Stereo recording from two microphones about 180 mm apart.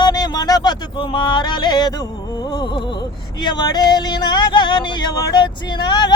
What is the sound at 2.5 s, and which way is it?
Speech, 25° left (ahead or behind).